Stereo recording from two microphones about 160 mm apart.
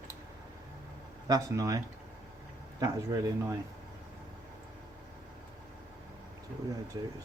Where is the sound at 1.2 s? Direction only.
20° right (ahead or behind).